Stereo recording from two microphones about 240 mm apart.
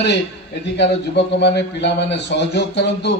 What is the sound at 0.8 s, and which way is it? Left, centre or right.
A man's voice, left.